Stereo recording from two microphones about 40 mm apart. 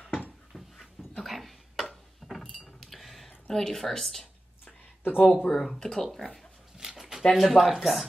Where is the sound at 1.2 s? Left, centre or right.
Centre.